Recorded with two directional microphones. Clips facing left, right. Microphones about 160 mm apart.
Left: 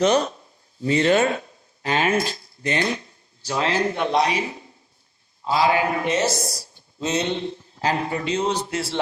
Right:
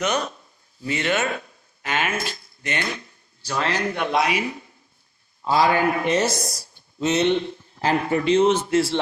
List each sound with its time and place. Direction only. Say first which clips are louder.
0.0 s a man's voice: left 6 dB; 30° left (ahead or behind)